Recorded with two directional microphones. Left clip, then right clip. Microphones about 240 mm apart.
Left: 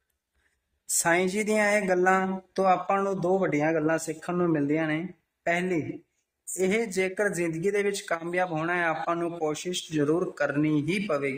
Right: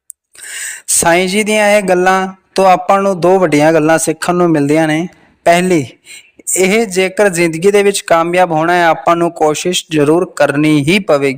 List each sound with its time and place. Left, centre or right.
1.0 s speech: right